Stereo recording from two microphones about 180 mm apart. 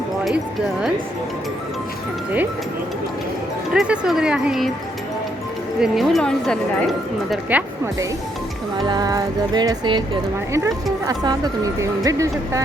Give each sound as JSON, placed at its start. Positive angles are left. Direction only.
{"t": 3.8, "sound": "speech", "side_deg": -5}
{"t": 5.8, "sound": "speech", "side_deg": 0}
{"t": 7.5, "sound": "speech", "side_deg": -10}
{"t": 8.9, "sound": "speech", "side_deg": -20}
{"t": 11.0, "sound": "speech", "side_deg": -20}